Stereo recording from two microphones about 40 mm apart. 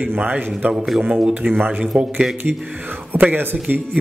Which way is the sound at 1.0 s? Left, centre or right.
Right.